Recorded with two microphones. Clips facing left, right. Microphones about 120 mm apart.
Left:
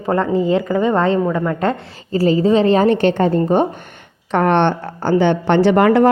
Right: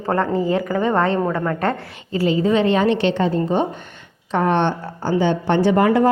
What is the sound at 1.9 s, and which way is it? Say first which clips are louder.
A woman's voice: left 4 dB; 40° left (ahead or behind).